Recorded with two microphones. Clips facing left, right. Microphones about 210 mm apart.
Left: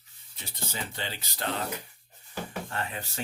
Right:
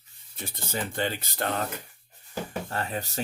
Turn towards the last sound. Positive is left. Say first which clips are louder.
# right 4 dB
turn(degrees=-40)  # may be behind; listen again after turning